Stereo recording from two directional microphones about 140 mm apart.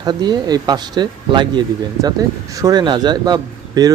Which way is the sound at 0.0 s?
30° right (ahead or behind).